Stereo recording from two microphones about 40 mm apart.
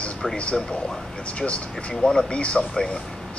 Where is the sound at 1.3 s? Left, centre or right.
Left.